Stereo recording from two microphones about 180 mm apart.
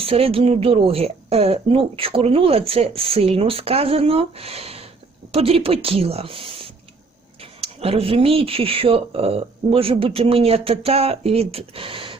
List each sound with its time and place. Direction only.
0.0 s speech: 30° right (ahead or behind)
7.6 s speech: 35° right (ahead or behind)